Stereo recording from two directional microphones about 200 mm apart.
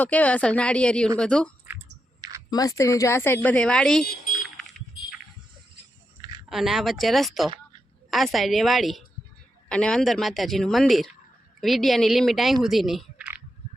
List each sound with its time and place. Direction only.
0.0 s a woman's voice: 5° left (ahead or behind)
2.5 s speech: 20° left (ahead or behind)
4.0 s speech: 50° left (ahead or behind)
6.5 s a woman's voice: centre (ahead or behind)
12.6 s a sound: centre (ahead or behind)